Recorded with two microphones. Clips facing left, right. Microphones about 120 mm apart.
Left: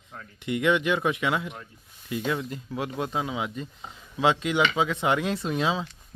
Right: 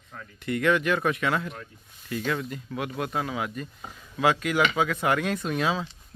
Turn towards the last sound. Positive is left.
turn(degrees=25)  # may be behind; listen again after turning